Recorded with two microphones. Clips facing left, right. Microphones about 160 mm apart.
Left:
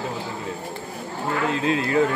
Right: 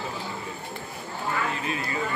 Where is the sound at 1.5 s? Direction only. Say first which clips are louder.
Left 9 dB; 90° left.